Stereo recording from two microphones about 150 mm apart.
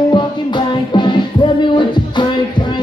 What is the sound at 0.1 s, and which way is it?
Music, 30° left (ahead or behind).